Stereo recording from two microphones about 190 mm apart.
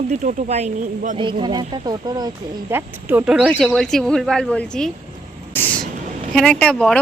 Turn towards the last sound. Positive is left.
turn(degrees=5)  # may be behind; listen again after turning